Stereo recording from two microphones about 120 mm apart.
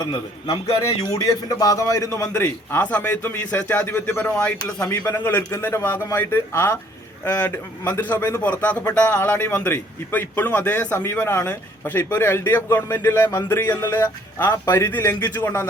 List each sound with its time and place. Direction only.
0.1 s a man's voice: 35° left (ahead or behind)
2.3 s a man's voice: 10° left (ahead or behind)